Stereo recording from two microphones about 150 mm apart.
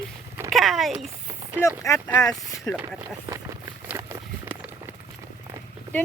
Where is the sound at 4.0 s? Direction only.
20° right (ahead or behind).